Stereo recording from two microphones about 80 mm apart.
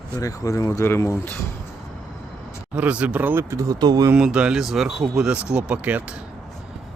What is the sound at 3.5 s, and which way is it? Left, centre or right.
Speech, right.